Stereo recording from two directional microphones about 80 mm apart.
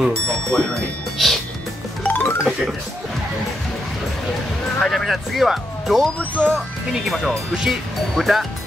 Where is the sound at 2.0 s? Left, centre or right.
Left.